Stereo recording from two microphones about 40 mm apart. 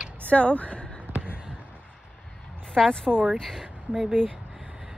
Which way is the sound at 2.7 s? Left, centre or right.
Centre.